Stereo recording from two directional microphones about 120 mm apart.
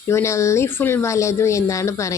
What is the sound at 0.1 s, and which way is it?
Speech, 25° left (ahead or behind).